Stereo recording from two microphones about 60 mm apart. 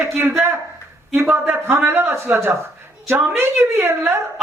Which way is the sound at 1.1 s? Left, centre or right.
Right.